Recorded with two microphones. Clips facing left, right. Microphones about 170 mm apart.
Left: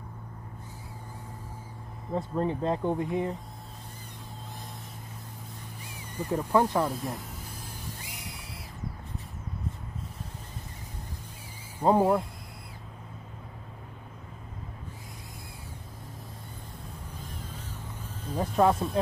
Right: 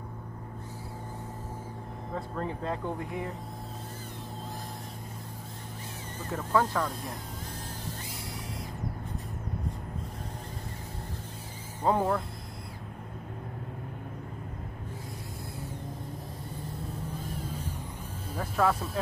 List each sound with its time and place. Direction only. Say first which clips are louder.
2.1 s speech: left 6 dB; 20° left (ahead or behind)
6.1 s speech: left 3 dB; 15° left (ahead or behind)
11.8 s speech: left 4 dB; 10° left (ahead or behind)
17.3 s boat: right 6 dB; 10° right (ahead or behind)
18.4 s speech: left 4 dB; 20° left (ahead or behind)